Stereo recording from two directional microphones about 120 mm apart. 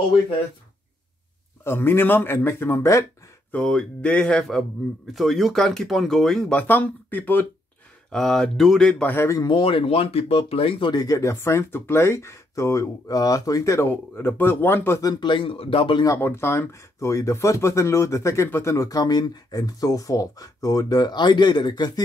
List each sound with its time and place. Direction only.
1.6 s speech: 20° left (ahead or behind)
3.5 s speech: 5° left (ahead or behind)
6.5 s speech: 15° left (ahead or behind)
8.1 s speech: 5° left (ahead or behind)
9.1 s speech: 20° left (ahead or behind)
9.4 s speech: 45° left (ahead or behind); by 15.0 s 20° left (ahead or behind)
15.0 s a man's voice: 40° left (ahead or behind)
16.0 s speech: 20° left (ahead or behind)